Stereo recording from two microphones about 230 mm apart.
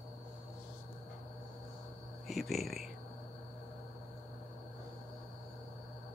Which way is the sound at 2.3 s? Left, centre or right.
Centre.